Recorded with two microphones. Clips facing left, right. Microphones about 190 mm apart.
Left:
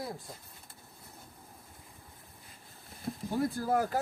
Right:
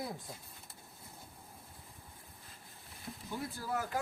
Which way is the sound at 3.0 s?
45° left (ahead or behind).